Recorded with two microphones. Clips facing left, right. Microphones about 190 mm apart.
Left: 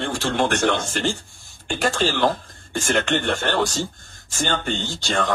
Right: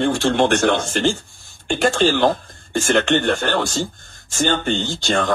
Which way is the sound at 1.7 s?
25° right (ahead or behind).